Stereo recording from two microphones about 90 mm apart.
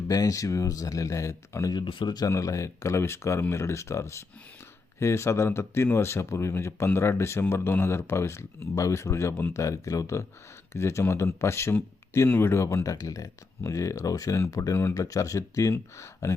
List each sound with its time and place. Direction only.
0.1 s speech: 40° left (ahead or behind)
1.7 s speech: 65° left (ahead or behind); by 2.3 s 50° left (ahead or behind)
2.3 s speech: 35° left (ahead or behind)